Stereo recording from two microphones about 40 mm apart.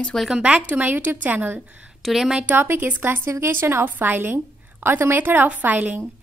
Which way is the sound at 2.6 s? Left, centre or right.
Right.